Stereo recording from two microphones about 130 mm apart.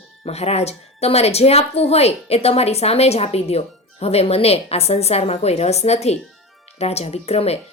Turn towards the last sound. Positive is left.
turn(degrees=55)  # may be behind; listen again after turning